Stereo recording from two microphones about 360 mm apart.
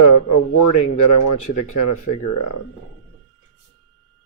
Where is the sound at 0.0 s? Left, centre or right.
Left.